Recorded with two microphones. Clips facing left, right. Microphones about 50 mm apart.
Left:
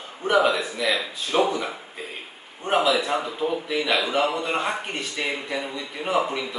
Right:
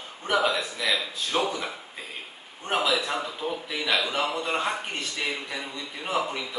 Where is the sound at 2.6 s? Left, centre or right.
Centre.